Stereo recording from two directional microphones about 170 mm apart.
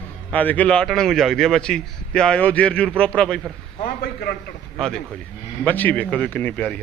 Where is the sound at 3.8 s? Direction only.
60° left (ahead or behind).